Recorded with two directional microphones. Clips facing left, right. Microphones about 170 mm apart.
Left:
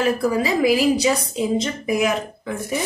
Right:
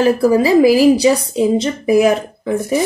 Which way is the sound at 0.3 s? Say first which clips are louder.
Right 8 dB; 30° right (ahead or behind).